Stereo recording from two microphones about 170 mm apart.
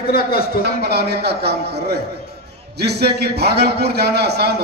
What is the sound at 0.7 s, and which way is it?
A man's voice, 70° right (ahead or behind).